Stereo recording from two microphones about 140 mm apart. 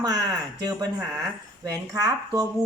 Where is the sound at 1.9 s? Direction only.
25° right (ahead or behind).